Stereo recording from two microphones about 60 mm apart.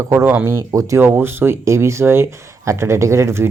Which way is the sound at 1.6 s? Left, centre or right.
Right.